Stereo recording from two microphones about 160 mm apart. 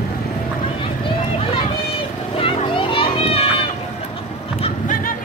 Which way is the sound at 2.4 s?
35° left (ahead or behind).